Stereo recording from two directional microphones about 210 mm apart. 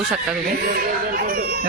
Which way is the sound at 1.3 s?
45° right (ahead or behind).